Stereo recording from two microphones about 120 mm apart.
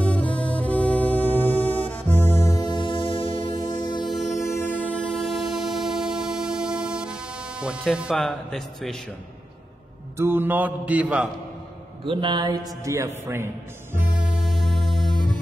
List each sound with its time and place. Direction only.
0.0 s music: 10° left (ahead or behind)
2.6 s music: 40° left (ahead or behind)
3.5 s music: 35° left (ahead or behind)
4.5 s train: 20° left (ahead or behind); by 8.9 s centre (ahead or behind)
10.1 s mantra: 20° right (ahead or behind)
12.0 s a man's voice: 45° right (ahead or behind); by 13.5 s 20° right (ahead or behind)
13.9 s music: 5° right (ahead or behind)